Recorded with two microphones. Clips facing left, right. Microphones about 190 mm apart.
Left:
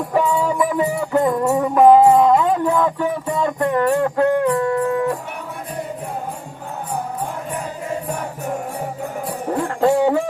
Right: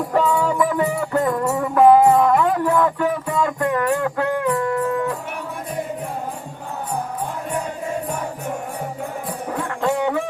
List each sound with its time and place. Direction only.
0.1 s music: 10° left (ahead or behind); by 4.5 s 30° left (ahead or behind)
4.5 s howl: 25° left (ahead or behind)
9.6 s music: 35° left (ahead or behind)